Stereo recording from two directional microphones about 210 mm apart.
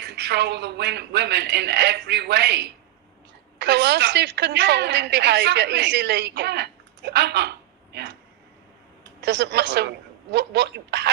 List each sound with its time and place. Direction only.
0.0 s a woman's voice: 55° right (ahead or behind)
9.2 s a woman's voice: 55° right (ahead or behind)